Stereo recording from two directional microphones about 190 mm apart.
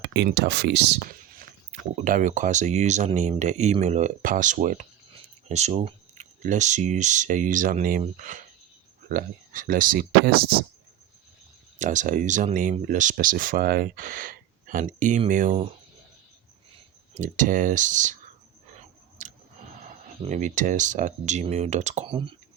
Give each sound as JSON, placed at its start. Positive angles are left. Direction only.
{"t": 0.0, "sound": "speech", "side_deg": -65}
{"t": 2.0, "sound": "speech", "side_deg": -45}
{"t": 11.8, "sound": "speech", "side_deg": -40}
{"t": 17.2, "sound": "speech", "side_deg": -45}
{"t": 19.2, "sound": "scissors", "side_deg": -40}
{"t": 20.2, "sound": "speech", "side_deg": -40}